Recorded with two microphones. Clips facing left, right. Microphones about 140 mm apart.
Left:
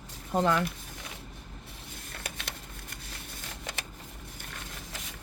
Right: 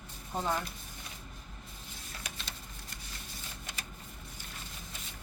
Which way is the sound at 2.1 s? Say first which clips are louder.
Left 4 dB; 60° left (ahead or behind).